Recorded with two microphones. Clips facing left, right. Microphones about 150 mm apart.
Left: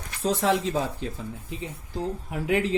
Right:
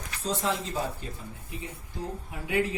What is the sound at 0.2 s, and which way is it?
Speech, 75° left (ahead or behind).